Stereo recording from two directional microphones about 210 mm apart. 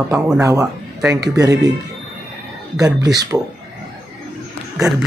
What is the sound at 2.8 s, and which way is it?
Speech, 20° right (ahead or behind).